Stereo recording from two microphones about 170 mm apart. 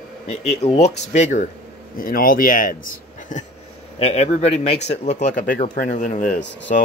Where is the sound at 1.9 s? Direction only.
55° left (ahead or behind).